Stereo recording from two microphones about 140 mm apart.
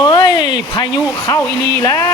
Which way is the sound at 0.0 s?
35° left (ahead or behind).